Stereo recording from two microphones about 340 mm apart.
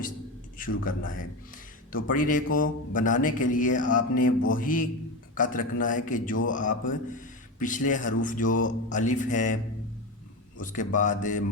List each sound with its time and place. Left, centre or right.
0.9 s a man's voice: left
10.6 s a man's voice: left